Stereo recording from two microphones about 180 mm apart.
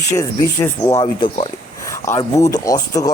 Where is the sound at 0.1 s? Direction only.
15° left (ahead or behind).